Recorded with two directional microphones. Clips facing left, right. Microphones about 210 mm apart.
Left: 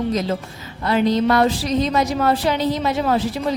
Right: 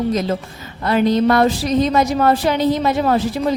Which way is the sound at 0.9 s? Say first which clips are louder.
Right 2 dB; 50° right (ahead or behind).